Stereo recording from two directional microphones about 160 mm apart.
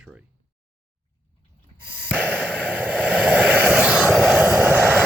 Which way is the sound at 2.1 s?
10° right (ahead or behind).